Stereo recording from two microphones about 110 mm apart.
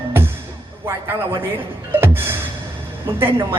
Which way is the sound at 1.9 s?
20° right (ahead or behind).